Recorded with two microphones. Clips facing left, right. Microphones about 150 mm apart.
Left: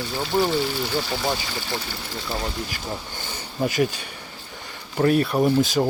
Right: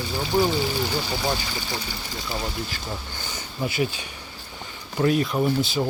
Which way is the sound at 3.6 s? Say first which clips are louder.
Left 4 dB; 50° left (ahead or behind).